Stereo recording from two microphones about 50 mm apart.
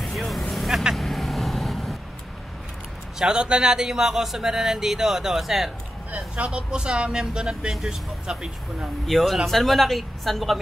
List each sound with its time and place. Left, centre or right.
0.0 s vehicle: centre
3.2 s a man's voice: centre
6.1 s a man's voice: right
9.0 s speech: centre